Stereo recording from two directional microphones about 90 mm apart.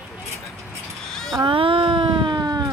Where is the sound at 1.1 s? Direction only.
5° left (ahead or behind).